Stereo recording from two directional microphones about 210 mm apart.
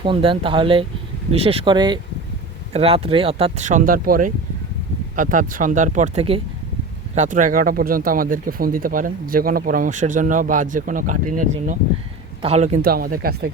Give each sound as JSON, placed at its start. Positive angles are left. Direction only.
{"t": 0.0, "sound": "speech", "side_deg": -25}
{"t": 12.8, "sound": "speech", "side_deg": -45}